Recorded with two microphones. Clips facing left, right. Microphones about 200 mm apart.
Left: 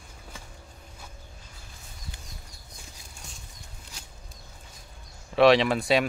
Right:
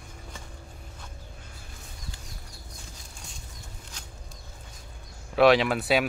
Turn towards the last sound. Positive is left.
turn(degrees=-5)  # may be behind; listen again after turning